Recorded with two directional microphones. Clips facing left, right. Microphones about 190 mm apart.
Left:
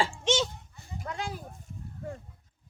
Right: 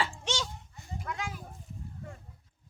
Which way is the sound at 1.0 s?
35° left (ahead or behind).